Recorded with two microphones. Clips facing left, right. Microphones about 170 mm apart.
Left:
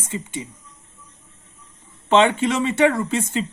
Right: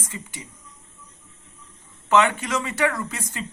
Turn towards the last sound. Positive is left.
turn(degrees=25)  # may be behind; listen again after turning